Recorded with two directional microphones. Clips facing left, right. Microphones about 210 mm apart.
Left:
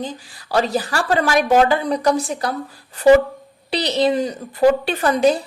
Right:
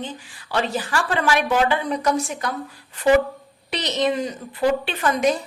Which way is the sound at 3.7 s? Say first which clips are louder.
Left 4 dB; 35° left (ahead or behind).